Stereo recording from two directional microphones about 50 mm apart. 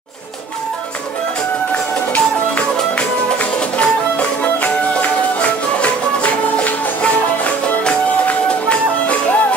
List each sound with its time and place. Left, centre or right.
3.3 s music: left
5.4 s music: left